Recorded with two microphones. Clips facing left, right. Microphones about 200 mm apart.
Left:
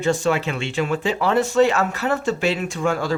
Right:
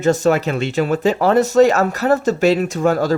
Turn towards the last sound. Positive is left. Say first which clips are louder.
# right 6 dB
turn(degrees=-40)  # may be behind; listen again after turning